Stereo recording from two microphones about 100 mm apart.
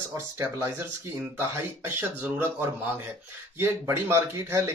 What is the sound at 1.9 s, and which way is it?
Speech, 20° right (ahead or behind).